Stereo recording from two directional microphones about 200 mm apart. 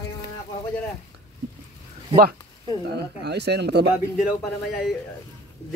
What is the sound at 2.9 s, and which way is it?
Speech, 55° right (ahead or behind).